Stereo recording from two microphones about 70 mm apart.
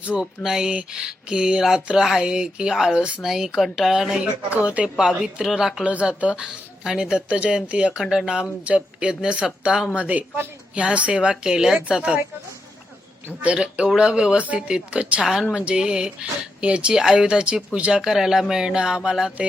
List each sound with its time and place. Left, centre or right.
0.1 s speech: centre
4.5 s speech: centre
5.8 s speech: centre
8.0 s speech: centre
8.3 s speech: centre
13.2 s speech: centre
15.2 s speech: centre
18.0 s speech: centre